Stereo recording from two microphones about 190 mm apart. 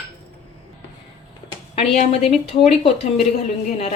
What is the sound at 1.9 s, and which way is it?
A woman's voice, 35° left (ahead or behind).